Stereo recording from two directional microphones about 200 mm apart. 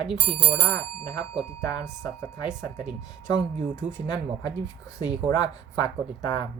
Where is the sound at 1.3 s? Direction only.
Centre (ahead or behind).